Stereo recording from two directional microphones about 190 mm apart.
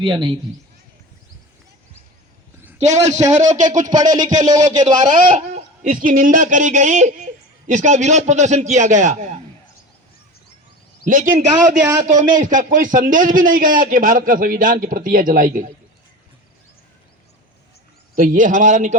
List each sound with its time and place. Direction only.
0.0 s speech: 25° right (ahead or behind)
2.7 s a man's voice: 40° right (ahead or behind)
3.8 s speech: 20° right (ahead or behind)
5.3 s speech: 45° right (ahead or behind)
11.0 s a man's voice: 45° right (ahead or behind)
18.2 s a man's voice: 45° right (ahead or behind)